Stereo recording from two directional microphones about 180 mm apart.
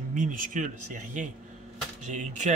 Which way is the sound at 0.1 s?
45° right (ahead or behind).